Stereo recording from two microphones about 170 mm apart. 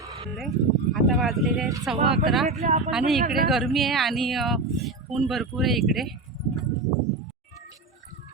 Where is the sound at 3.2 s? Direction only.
60° right (ahead or behind).